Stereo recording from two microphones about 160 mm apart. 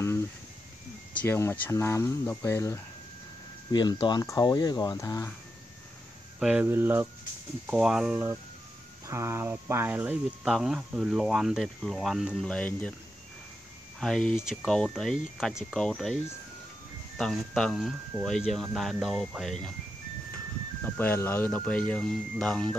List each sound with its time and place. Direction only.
1.1 s speech: 15° left (ahead or behind)
6.4 s speech: 10° right (ahead or behind)
9.0 s speech: 15° right (ahead or behind); by 12.9 s 10° left (ahead or behind)
13.9 s speech: 5° left (ahead or behind)
17.2 s speech: centre (ahead or behind)
20.8 s speech: 15° left (ahead or behind)